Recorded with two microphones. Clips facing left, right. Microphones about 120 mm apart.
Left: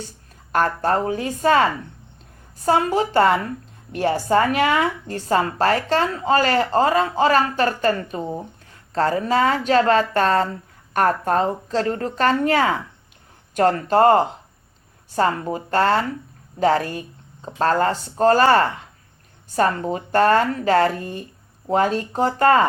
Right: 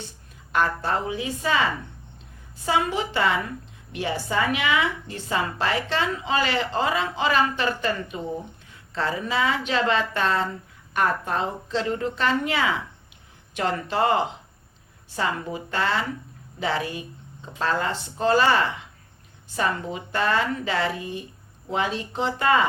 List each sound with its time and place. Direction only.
0.5 s a woman's voice: 45° left (ahead or behind)
2.6 s a woman's voice: 45° left (ahead or behind)